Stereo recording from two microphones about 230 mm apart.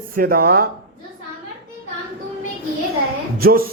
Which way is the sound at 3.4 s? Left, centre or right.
Right.